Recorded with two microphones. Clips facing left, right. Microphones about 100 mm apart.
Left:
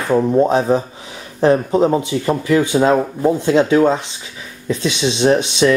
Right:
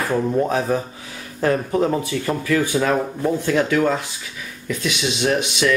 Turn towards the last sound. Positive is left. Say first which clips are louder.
# left 6 dB
turn(degrees=30)  # may be behind; listen again after turning